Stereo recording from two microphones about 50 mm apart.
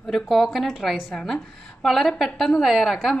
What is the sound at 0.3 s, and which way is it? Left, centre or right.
A woman's voice, centre.